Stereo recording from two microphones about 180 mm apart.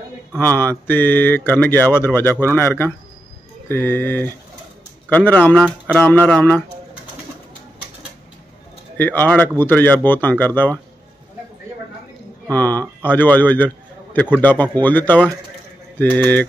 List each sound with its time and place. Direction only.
0.4 s a man's voice: 10° left (ahead or behind)
8.9 s a man's voice: 10° left (ahead or behind)
12.5 s a man's voice: 10° left (ahead or behind)